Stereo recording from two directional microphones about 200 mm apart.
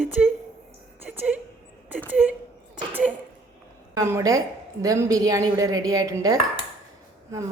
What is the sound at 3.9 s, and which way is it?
A woman's voice, 15° right (ahead or behind).